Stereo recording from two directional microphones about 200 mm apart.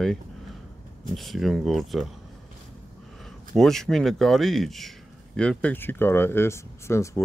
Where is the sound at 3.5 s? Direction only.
Centre (ahead or behind).